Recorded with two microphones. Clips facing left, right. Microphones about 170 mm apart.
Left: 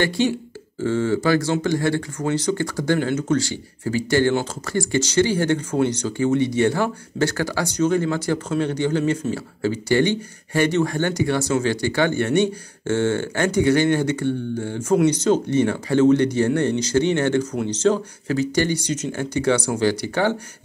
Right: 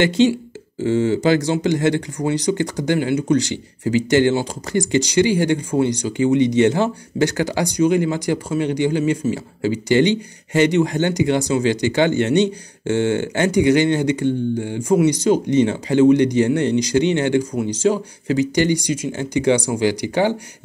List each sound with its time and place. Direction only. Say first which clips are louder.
0.2 s speech: right 5 dB; 20° right (ahead or behind)